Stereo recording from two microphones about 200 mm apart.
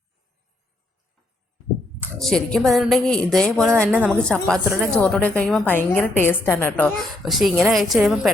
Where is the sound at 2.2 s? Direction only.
5° left (ahead or behind).